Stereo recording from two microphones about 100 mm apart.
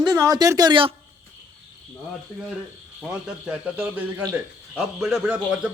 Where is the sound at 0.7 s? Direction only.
60° right (ahead or behind).